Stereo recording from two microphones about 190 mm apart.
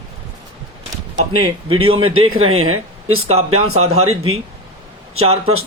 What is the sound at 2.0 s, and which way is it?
Speech, 90° right.